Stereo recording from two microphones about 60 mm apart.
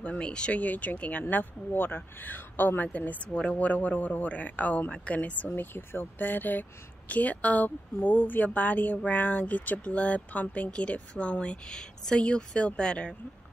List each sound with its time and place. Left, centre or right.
0.0 s a woman's voice: centre